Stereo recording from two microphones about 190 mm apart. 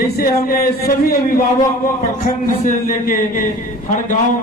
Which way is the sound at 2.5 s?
45° left (ahead or behind).